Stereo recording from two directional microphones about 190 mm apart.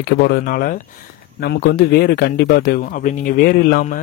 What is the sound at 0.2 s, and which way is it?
A man's voice, 55° left (ahead or behind).